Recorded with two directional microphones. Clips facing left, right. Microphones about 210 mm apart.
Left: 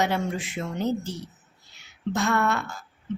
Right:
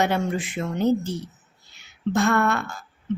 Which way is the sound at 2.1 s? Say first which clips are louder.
Right 3 dB; 55° right (ahead or behind).